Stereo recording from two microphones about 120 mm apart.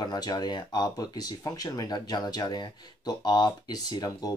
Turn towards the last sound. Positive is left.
turn(degrees=30)  # may be behind; listen again after turning